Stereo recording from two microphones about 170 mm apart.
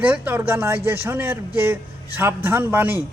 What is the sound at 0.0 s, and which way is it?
Speech, 10° right (ahead or behind).